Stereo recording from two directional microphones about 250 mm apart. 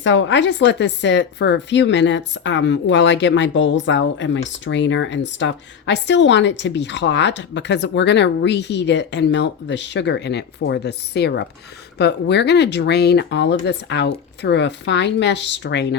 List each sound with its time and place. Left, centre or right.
0.0 s a woman's voice: left